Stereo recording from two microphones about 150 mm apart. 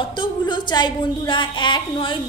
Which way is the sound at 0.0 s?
30° left (ahead or behind).